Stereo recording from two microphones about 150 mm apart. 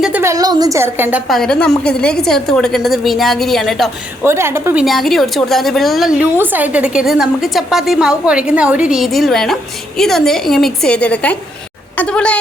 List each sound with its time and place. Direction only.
0.2 s a woman's voice: 20° right (ahead or behind)
1.3 s a woman's voice: 5° left (ahead or behind)
4.2 s a woman's voice: 15° right (ahead or behind); by 6.2 s centre (ahead or behind)
6.3 s a woman's voice: 15° right (ahead or behind); by 12.4 s 5° left (ahead or behind)